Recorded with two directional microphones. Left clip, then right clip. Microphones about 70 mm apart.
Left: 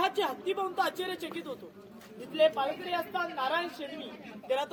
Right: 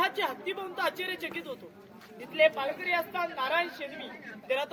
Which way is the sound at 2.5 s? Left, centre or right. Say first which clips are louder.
Right 2 dB; left.